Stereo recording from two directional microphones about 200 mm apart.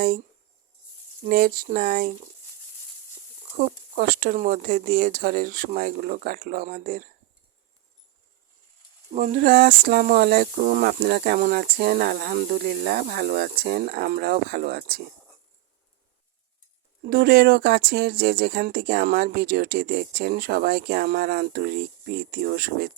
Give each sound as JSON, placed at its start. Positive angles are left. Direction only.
{"t": 1.2, "sound": "speech", "side_deg": -50}
{"t": 3.9, "sound": "speech", "side_deg": -45}
{"t": 9.1, "sound": "speech", "side_deg": -40}
{"t": 17.0, "sound": "speech", "side_deg": -50}